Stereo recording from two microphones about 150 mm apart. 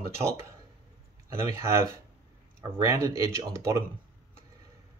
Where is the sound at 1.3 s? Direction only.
20° right (ahead or behind).